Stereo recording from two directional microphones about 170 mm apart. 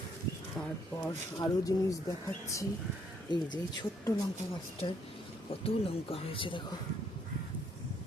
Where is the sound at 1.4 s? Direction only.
20° left (ahead or behind).